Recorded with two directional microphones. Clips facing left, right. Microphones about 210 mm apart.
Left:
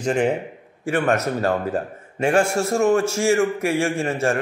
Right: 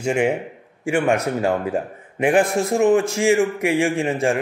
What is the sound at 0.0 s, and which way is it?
A man's voice, 10° right (ahead or behind).